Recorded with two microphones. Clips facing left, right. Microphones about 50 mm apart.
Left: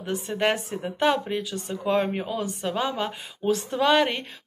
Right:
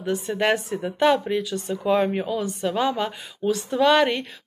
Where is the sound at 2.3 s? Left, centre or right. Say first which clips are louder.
Right 3 dB; centre.